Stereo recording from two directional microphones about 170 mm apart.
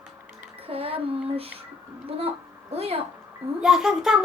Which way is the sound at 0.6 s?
35° right (ahead or behind).